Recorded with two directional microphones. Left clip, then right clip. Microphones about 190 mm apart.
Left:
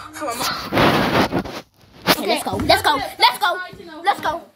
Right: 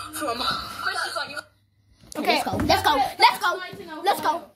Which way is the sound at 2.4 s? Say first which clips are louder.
Left 4 dB; 15° left (ahead or behind).